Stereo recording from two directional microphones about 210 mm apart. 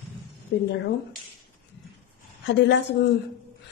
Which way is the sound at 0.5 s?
55° left (ahead or behind).